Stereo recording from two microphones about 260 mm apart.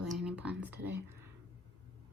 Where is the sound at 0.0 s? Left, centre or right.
Centre.